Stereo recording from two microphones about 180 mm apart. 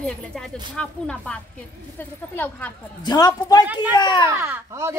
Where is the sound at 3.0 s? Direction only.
20° left (ahead or behind).